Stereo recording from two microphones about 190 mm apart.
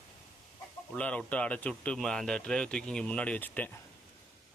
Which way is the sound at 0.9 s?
5° left (ahead or behind).